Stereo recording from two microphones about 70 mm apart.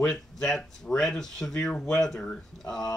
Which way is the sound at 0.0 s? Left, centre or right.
Centre.